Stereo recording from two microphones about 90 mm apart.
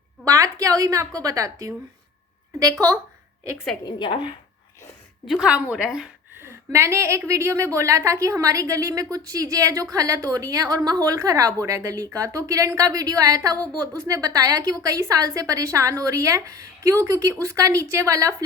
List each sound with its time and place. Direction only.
0.3 s a woman's voice: 40° right (ahead or behind)
3.8 s a woman's voice: 60° left (ahead or behind)
5.2 s a woman's voice: centre (ahead or behind)
5.5 s a woman's voice: 15° right (ahead or behind)
6.3 s a sound: 30° right (ahead or behind)
7.3 s a woman's voice: 35° right (ahead or behind)